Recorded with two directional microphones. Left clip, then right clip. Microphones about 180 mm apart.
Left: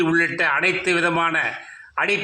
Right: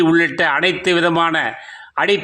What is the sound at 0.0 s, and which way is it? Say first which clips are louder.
A man's voice: right 4 dB; 35° right (ahead or behind).